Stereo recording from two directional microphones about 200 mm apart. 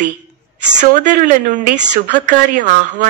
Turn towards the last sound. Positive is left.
turn(degrees=-40)  # may be behind; listen again after turning